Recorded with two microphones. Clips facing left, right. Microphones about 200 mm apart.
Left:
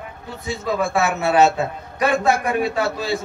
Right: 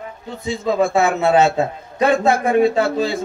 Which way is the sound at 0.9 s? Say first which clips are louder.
Right 1 dB; 25° right (ahead or behind).